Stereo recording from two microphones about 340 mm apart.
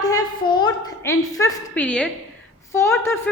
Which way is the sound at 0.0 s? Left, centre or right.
Centre.